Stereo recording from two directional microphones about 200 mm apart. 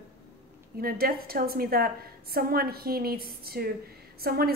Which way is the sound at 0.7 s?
50° right (ahead or behind).